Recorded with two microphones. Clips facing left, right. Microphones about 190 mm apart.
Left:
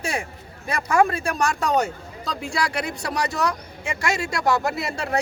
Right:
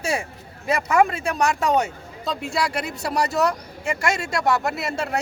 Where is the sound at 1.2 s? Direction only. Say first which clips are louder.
Right 2 dB; centre (ahead or behind).